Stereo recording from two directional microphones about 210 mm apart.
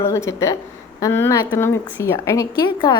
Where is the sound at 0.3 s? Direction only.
15° left (ahead or behind).